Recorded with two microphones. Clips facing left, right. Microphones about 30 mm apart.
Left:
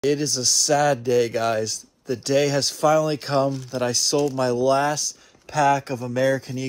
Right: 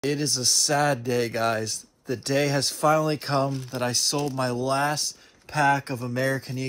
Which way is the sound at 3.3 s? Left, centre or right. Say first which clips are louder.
Left 4 dB; centre.